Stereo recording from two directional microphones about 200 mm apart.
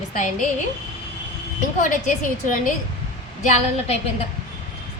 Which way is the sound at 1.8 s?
40° left (ahead or behind).